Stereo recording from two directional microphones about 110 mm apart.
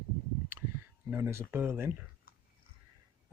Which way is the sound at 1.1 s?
20° right (ahead or behind).